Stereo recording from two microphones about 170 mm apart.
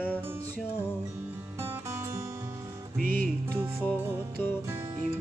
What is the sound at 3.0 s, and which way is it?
Music, 55° right (ahead or behind).